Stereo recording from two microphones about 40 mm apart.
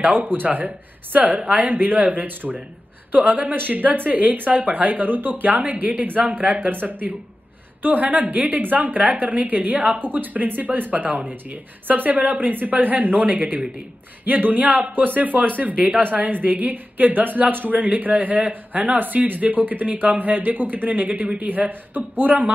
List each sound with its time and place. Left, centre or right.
0.0 s speech: right
2.2 s speech: right